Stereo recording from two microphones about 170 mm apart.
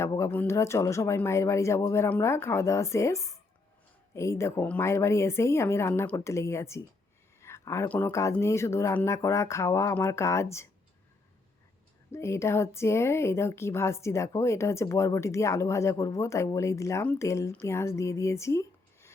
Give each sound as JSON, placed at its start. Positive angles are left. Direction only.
{"t": 0.0, "sound": "a woman's voice", "side_deg": 15}
{"t": 12.1, "sound": "a woman's voice", "side_deg": 15}